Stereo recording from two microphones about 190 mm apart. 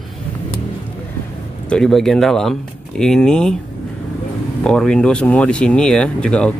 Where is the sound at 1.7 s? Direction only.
Centre (ahead or behind).